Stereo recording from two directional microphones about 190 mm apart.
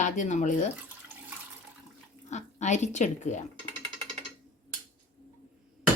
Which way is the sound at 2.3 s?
35° left (ahead or behind).